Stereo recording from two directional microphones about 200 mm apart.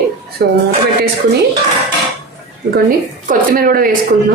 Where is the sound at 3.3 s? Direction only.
45° right (ahead or behind).